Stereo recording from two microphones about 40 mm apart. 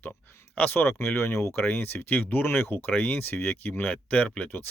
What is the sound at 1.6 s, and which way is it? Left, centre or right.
Speech, left.